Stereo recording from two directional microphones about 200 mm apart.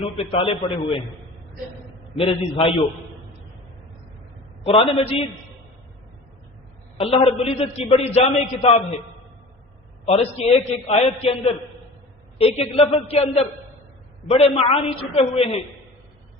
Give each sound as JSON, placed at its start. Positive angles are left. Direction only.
{"t": 0.0, "sound": "a man's voice", "side_deg": 30}
{"t": 2.1, "sound": "a man's voice", "side_deg": 30}
{"t": 4.6, "sound": "a man's voice", "side_deg": 30}
{"t": 6.9, "sound": "a man's voice", "side_deg": 30}
{"t": 10.1, "sound": "a man's voice", "side_deg": 30}
{"t": 12.4, "sound": "a man's voice", "side_deg": 30}